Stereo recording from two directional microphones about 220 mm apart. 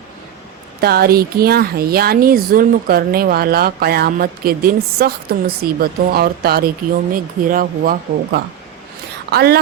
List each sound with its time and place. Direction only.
0.8 s speech: 45° right (ahead or behind)